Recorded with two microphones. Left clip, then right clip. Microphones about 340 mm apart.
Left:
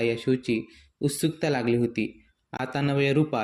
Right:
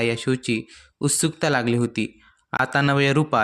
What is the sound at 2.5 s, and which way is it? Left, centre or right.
Speech, right.